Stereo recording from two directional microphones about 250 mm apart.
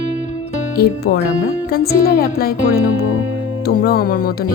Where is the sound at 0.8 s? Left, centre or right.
Left.